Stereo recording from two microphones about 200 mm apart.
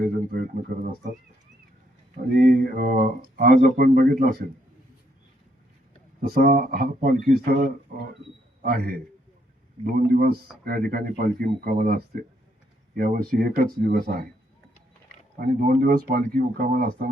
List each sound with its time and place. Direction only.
0.7 s speech: 45° right (ahead or behind)
2.3 s speech: 45° right (ahead or behind)
6.2 s speech: 50° right (ahead or behind)
15.4 s speech: 45° right (ahead or behind)